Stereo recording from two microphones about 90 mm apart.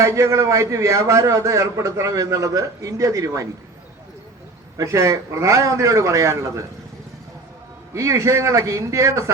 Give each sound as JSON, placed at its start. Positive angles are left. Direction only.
{"t": 0.0, "sound": "a man's voice", "side_deg": -35}
{"t": 4.8, "sound": "a man's voice", "side_deg": -35}
{"t": 7.9, "sound": "a man's voice", "side_deg": -35}